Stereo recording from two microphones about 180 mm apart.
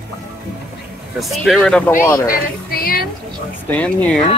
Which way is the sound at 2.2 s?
55° left (ahead or behind).